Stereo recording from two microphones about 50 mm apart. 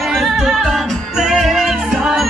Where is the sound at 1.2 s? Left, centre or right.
Centre.